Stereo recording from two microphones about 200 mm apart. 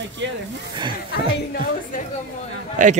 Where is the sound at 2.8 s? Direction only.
40° right (ahead or behind).